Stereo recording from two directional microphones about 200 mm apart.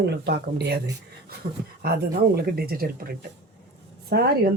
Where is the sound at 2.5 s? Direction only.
50° right (ahead or behind).